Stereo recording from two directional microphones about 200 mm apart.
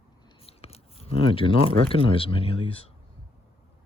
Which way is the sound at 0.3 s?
30° left (ahead or behind).